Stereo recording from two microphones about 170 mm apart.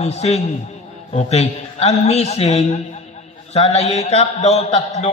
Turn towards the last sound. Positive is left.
turn(degrees=40)  # may be behind; listen again after turning